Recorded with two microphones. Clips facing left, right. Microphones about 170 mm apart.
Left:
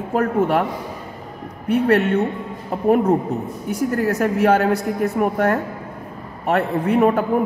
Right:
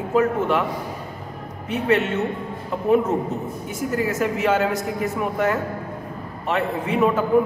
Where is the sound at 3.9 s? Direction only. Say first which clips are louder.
Left 2 dB; 60° left (ahead or behind).